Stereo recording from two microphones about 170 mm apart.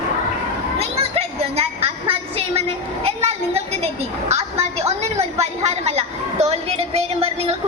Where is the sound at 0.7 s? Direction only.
35° right (ahead or behind).